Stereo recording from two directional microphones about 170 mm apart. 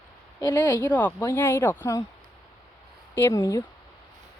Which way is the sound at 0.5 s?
15° left (ahead or behind).